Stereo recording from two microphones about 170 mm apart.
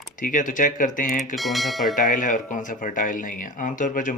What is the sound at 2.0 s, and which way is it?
Speech, 50° left (ahead or behind).